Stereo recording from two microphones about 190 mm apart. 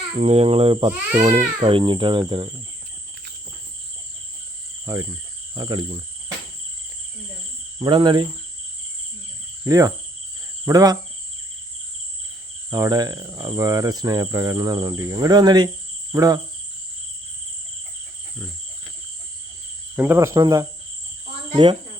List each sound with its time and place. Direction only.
0.2 s speech: 30° right (ahead or behind)
0.9 s cricket: 15° right (ahead or behind)
1.6 s cricket: 25° right (ahead or behind)
5.5 s cricket: 25° right (ahead or behind)
7.8 s cricket: 25° right (ahead or behind)
9.6 s cricket: 20° right (ahead or behind)
12.7 s cricket: 20° right (ahead or behind)
20.0 s cricket: 15° right (ahead or behind)
21.5 s speech: 25° right (ahead or behind)